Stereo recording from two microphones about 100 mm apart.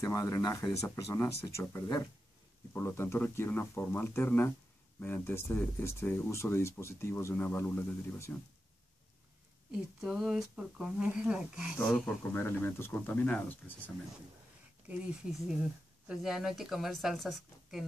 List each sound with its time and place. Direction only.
0.0 s speech: 35° left (ahead or behind)
9.7 s speech: 5° right (ahead or behind)
12.3 s speech: 20° left (ahead or behind)
15.4 s speech: 10° right (ahead or behind)